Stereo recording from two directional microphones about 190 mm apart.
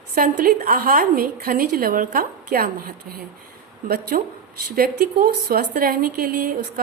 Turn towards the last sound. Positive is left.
turn(degrees=-50)  # may be behind; listen again after turning